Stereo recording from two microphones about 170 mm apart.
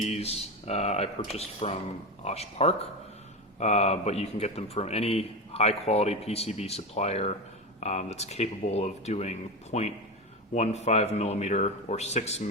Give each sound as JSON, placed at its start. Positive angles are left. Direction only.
{"t": 0.0, "sound": "speech", "side_deg": 40}